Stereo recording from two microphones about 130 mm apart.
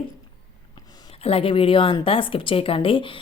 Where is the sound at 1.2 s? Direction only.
45° left (ahead or behind).